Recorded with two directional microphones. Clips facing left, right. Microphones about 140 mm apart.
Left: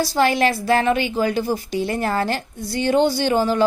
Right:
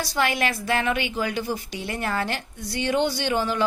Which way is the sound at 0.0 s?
30° left (ahead or behind).